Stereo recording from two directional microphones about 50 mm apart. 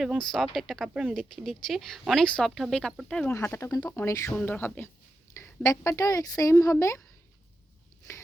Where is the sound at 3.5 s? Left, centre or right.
Left.